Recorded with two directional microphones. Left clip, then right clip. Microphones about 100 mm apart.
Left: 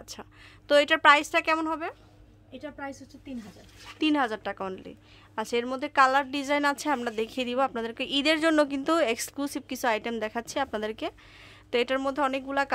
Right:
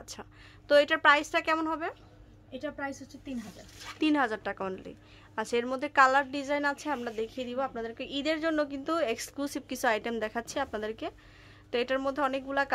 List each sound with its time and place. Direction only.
0.0 s a sound: 25° left (ahead or behind)
0.7 s speech: 40° left (ahead or behind); by 2.0 s 20° left (ahead or behind)
2.5 s a woman's voice: 5° left (ahead or behind)
4.0 s a woman's voice: 20° left (ahead or behind)
6.3 s a woman's voice: 50° left (ahead or behind); by 9.0 s 70° left (ahead or behind)
9.0 s speech: 40° left (ahead or behind)
9.4 s a woman's voice: 25° left (ahead or behind)
10.7 s speech: 40° left (ahead or behind)